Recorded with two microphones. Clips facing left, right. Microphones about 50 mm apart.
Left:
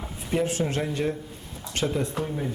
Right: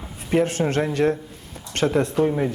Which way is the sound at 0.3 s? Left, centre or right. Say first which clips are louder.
Right 5 dB; right.